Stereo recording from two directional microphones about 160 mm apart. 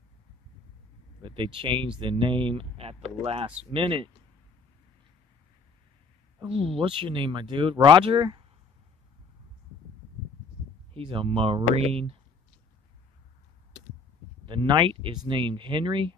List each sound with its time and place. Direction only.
1.2 s speech: 30° right (ahead or behind)
6.4 s speech: 35° right (ahead or behind)
10.9 s speech: 35° right (ahead or behind)
14.4 s speech: 30° right (ahead or behind)